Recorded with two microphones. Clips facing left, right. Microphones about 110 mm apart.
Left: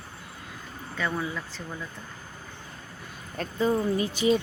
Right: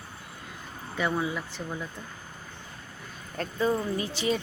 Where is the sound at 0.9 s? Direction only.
15° right (ahead or behind).